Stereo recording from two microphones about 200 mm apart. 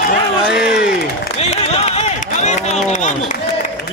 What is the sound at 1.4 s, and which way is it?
Applause, 30° left (ahead or behind).